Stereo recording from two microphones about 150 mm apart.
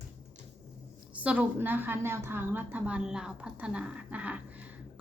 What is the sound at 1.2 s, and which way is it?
A woman's voice, 10° right (ahead or behind).